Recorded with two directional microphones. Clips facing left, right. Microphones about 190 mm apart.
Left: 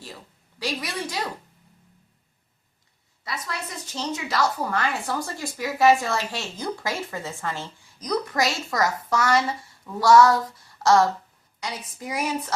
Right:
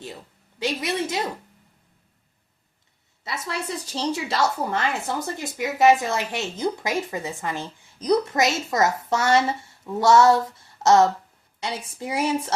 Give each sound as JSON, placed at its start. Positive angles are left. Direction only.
{"t": 0.6, "sound": "a woman's voice", "side_deg": -25}
{"t": 3.2, "sound": "a woman's voice", "side_deg": -25}
{"t": 7.9, "sound": "a woman's voice", "side_deg": -30}